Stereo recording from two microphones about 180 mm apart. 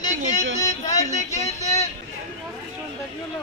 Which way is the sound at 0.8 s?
40° left (ahead or behind).